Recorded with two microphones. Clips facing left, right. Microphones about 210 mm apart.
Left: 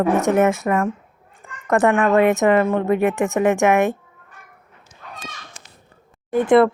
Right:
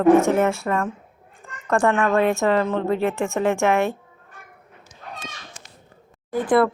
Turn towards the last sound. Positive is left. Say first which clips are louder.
# left 4 dB
turn(degrees=25)  # may be behind; listen again after turning